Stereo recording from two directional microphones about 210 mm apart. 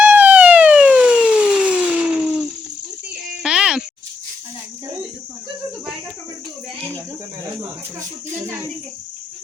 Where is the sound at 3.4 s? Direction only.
5° right (ahead or behind).